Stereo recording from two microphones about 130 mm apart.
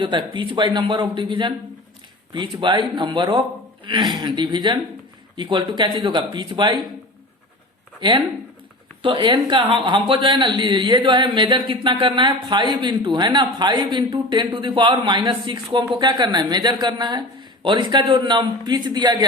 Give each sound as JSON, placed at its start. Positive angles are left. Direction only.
{"t": 0.0, "sound": "a woman's voice", "side_deg": -40}
{"t": 9.0, "sound": "a woman's voice", "side_deg": -40}